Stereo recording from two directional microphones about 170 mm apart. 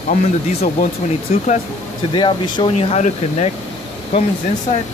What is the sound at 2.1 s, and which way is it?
Speech, 25° left (ahead or behind).